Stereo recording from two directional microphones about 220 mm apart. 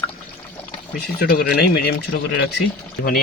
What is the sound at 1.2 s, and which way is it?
Speech, 45° left (ahead or behind).